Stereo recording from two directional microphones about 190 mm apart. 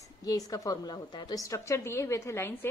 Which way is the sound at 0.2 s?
20° left (ahead or behind).